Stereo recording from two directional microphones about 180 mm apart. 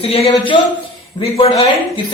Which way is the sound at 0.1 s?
30° left (ahead or behind).